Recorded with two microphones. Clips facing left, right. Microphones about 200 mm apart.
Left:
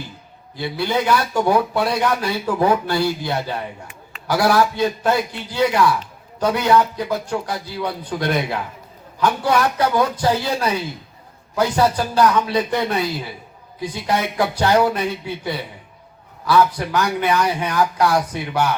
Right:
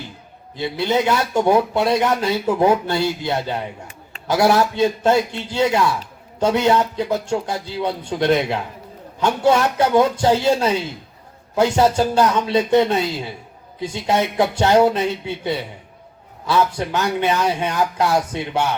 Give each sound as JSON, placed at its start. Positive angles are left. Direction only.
{"t": 0.5, "sound": "speech", "side_deg": -20}